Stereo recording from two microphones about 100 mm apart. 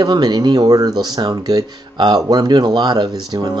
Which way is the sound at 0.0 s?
45° right (ahead or behind).